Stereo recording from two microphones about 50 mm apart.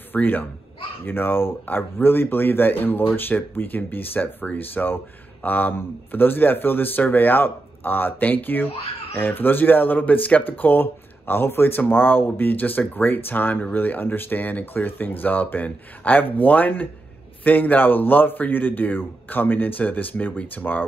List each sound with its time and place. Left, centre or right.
0.1 s speech: left